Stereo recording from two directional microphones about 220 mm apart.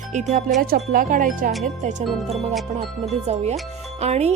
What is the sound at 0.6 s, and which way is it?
Speech, 40° right (ahead or behind).